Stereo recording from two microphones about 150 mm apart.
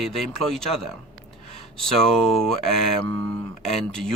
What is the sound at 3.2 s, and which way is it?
Speech, 25° left (ahead or behind).